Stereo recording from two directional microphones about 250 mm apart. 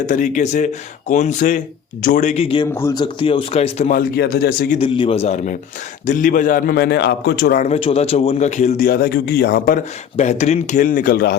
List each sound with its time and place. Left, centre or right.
0.0 s speech: left
2.7 s speech: centre; by 4.8 s left
4.8 s a man's voice: left